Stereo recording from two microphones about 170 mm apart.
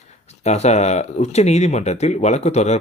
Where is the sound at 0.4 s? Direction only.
40° left (ahead or behind).